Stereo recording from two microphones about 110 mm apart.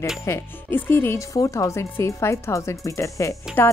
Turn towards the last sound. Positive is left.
turn(degrees=30)  # may be behind; listen again after turning